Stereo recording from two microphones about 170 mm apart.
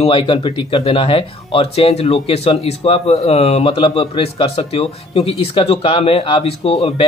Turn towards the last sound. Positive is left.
turn(degrees=35)  # may be behind; listen again after turning